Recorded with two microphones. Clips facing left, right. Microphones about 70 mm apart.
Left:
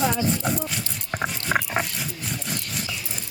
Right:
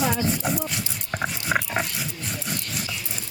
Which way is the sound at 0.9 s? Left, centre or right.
Centre.